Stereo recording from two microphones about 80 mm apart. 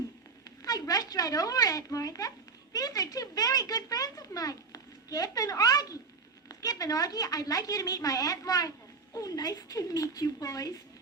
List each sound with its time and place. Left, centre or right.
0.4 s a woman's voice: left